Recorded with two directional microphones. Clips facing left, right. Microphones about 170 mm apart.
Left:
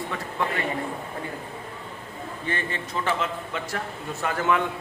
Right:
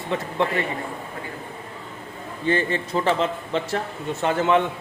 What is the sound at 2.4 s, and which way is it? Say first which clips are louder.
A man's voice: right 9 dB; 30° right (ahead or behind).